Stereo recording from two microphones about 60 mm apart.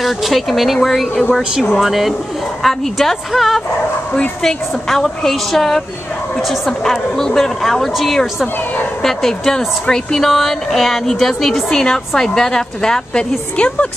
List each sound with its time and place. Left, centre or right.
0.0 s a woman's voice: centre